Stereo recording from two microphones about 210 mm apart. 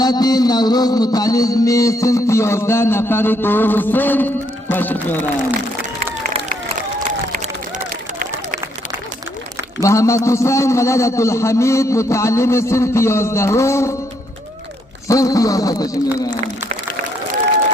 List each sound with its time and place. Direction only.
0.0 s music: 20° left (ahead or behind)
9.8 s music: 15° left (ahead or behind)
15.0 s music: 15° left (ahead or behind)